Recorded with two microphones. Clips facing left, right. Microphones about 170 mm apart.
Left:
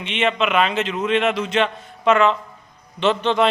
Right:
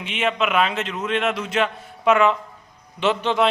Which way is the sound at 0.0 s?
5° right (ahead or behind).